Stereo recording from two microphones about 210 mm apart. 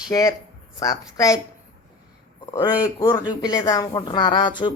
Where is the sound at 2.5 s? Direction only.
20° left (ahead or behind).